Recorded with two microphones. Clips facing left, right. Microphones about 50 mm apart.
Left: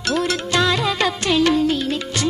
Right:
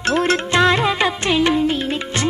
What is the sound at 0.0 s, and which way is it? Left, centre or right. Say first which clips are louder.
Music: right 3 dB; right.